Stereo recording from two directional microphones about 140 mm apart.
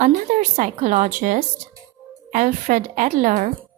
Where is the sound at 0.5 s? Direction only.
60° right (ahead or behind).